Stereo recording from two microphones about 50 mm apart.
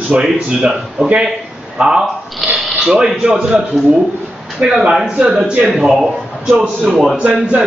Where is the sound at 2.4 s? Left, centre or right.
Centre.